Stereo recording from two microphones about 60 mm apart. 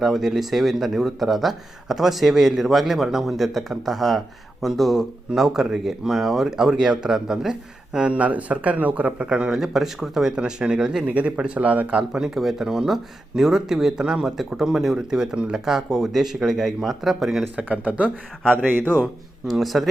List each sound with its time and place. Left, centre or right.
0.0 s speech: centre
7.9 s speech: centre
9.5 s speech: centre
11.0 s speech: right; by 17.4 s centre
17.6 s speech: right
18.5 s speech: right
19.5 s speech: centre